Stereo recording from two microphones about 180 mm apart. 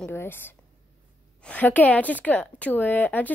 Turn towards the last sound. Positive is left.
turn(degrees=10)  # may be behind; listen again after turning